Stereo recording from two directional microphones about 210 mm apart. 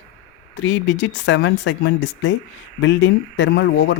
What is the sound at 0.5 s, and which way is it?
Speech, 60° left (ahead or behind).